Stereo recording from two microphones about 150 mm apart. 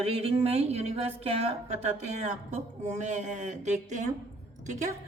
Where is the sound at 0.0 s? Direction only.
40° right (ahead or behind).